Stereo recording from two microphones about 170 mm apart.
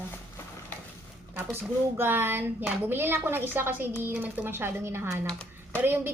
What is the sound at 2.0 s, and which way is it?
A woman's voice, 10° right (ahead or behind).